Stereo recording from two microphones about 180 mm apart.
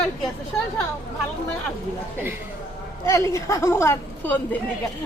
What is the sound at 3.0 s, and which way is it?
Speech, 15° left (ahead or behind).